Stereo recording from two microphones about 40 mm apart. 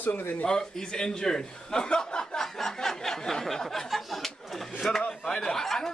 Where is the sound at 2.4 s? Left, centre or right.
Centre.